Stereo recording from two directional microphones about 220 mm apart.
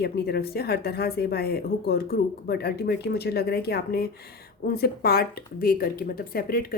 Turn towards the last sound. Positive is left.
turn(degrees=40)  # may be behind; listen again after turning